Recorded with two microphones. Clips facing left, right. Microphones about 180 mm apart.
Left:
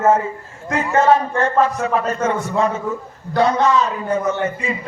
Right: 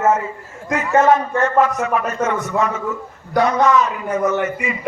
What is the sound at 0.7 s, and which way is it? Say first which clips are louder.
A man's voice: even; 30° left (ahead or behind).